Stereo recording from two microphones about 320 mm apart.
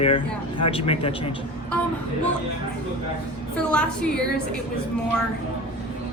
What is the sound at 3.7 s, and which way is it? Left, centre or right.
Speech, centre.